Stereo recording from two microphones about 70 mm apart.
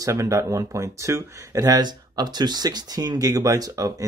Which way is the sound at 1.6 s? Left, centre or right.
Right.